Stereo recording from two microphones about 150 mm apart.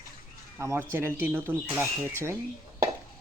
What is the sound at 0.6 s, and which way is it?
Speech, 15° right (ahead or behind).